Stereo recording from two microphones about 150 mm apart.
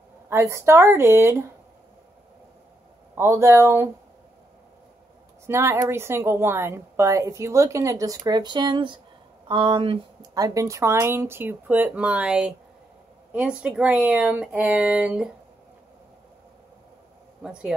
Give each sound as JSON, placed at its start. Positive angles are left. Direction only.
{"t": 0.3, "sound": "a woman's voice", "side_deg": -20}
{"t": 3.2, "sound": "a woman's voice", "side_deg": -15}
{"t": 5.5, "sound": "a woman's voice", "side_deg": -15}
{"t": 10.3, "sound": "a woman's voice", "side_deg": -25}
{"t": 17.4, "sound": "speech", "side_deg": -5}